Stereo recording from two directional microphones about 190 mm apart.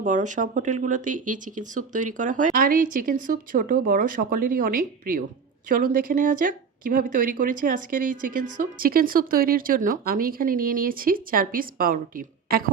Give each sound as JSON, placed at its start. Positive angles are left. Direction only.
{"t": 0.0, "sound": "speech", "side_deg": -40}